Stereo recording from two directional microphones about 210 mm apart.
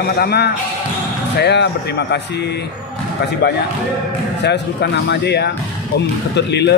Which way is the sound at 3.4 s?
50° left (ahead or behind).